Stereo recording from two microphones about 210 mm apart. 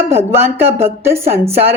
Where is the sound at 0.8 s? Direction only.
10° right (ahead or behind).